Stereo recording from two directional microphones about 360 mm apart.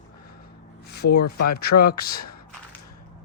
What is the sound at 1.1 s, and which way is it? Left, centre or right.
Speech, left.